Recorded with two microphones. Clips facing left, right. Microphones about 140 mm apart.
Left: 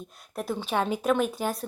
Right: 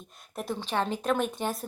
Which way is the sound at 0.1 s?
Centre (ahead or behind).